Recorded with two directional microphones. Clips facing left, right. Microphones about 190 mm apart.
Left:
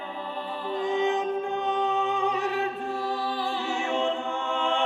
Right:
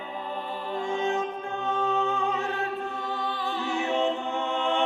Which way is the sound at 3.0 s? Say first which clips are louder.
Left 2 dB; 35° left (ahead or behind).